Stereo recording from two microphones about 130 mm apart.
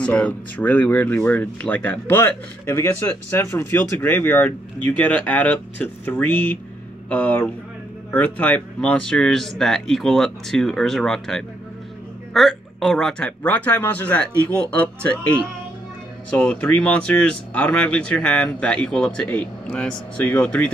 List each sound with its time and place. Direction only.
0.0 s speech: 10° left (ahead or behind)
16.3 s speech: 10° left (ahead or behind)